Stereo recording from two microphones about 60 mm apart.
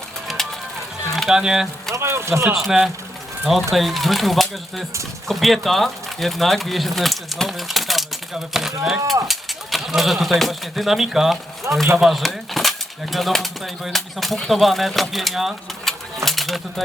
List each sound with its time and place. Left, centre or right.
0.4 s music: centre
1.3 s speech: centre
2.0 s speech: right
2.5 s speech: centre
15.9 s a sound: centre